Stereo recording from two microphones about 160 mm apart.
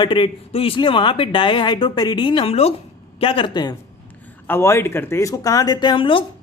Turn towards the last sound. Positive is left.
turn(degrees=35)  # may be behind; listen again after turning